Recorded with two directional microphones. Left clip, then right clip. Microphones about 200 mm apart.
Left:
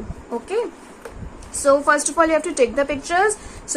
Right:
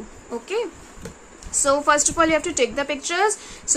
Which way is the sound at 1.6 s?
30° right (ahead or behind).